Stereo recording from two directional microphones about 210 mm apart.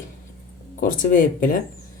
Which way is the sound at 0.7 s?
40° left (ahead or behind).